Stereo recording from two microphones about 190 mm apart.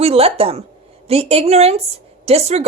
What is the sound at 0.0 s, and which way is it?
Speech, 30° right (ahead or behind).